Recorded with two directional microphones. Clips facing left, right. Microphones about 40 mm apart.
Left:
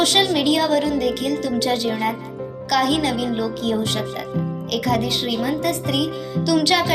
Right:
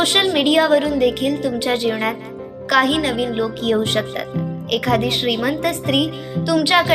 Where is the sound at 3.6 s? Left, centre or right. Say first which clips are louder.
Right 4 dB; right.